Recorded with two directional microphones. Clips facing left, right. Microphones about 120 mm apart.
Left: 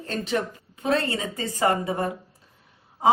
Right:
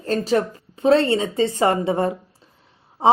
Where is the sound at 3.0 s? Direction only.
30° right (ahead or behind).